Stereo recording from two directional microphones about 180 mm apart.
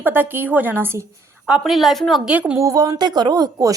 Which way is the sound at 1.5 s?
Centre (ahead or behind).